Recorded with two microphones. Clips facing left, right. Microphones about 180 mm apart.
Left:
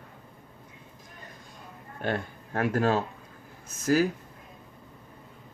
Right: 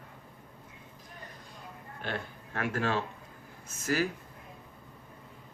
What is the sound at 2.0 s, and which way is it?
Speech, 45° left (ahead or behind).